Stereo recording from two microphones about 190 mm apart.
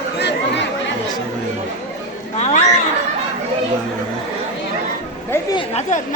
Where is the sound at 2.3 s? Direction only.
35° left (ahead or behind).